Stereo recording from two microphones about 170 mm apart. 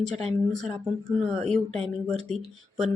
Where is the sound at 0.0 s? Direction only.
40° right (ahead or behind).